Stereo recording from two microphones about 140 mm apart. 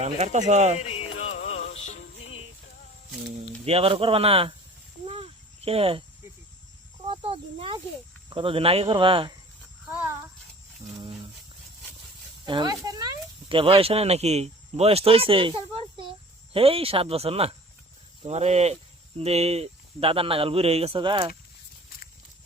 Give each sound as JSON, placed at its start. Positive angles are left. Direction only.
{"t": 0.0, "sound": "speech", "side_deg": -55}
{"t": 0.8, "sound": "music", "side_deg": 50}
{"t": 3.7, "sound": "speech", "side_deg": -45}
{"t": 5.0, "sound": "a sound", "side_deg": -40}
{"t": 7.1, "sound": "snake", "side_deg": -40}
{"t": 8.3, "sound": "speech", "side_deg": -40}
{"t": 9.8, "sound": "a sound", "side_deg": -10}
{"t": 12.5, "sound": "speech", "side_deg": -35}